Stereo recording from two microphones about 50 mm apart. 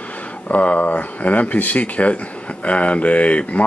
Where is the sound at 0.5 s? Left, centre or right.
Left.